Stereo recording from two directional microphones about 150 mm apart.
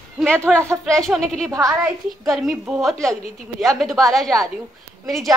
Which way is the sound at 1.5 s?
20° right (ahead or behind).